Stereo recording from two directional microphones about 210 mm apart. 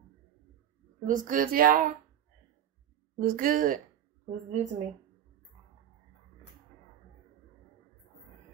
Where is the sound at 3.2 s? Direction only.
40° right (ahead or behind).